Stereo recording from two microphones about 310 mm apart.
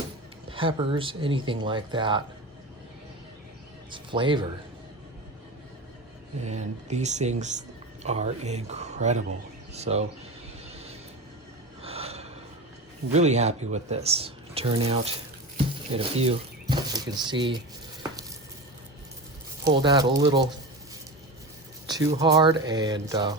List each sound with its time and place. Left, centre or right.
0.5 s speech: centre
3.9 s speech: centre
6.4 s speech: right
11.8 s gasp: centre
13.1 s speech: right
19.6 s speech: centre
21.8 s speech: centre